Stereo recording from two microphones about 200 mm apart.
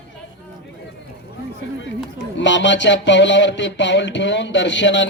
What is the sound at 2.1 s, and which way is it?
Speech, 65° left (ahead or behind).